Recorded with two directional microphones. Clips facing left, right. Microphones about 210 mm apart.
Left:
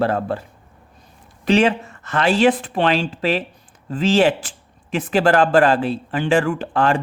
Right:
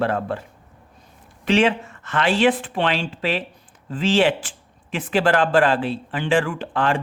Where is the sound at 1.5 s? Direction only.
40° left (ahead or behind).